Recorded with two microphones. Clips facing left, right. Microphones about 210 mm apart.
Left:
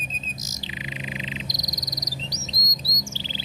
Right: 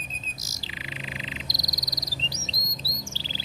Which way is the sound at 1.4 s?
20° left (ahead or behind).